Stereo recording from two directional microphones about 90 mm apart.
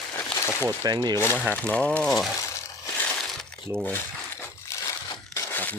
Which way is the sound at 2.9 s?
20° left (ahead or behind).